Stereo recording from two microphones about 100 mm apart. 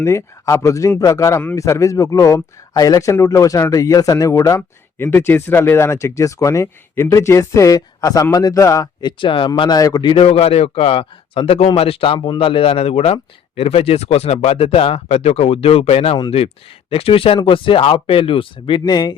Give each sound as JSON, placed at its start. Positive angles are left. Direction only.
{"t": 0.0, "sound": "speech", "side_deg": 25}
{"t": 9.6, "sound": "a man's voice", "side_deg": 40}
{"t": 10.2, "sound": "a man's voice", "side_deg": 75}
{"t": 11.8, "sound": "a man's voice", "side_deg": 70}
{"t": 16.9, "sound": "speech", "side_deg": 70}